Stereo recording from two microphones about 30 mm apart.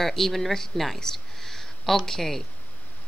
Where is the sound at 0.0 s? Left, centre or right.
Centre.